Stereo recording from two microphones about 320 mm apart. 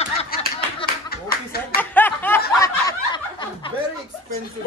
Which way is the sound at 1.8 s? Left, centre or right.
Centre.